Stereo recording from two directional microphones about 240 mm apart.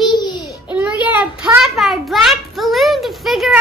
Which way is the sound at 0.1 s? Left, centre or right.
Centre.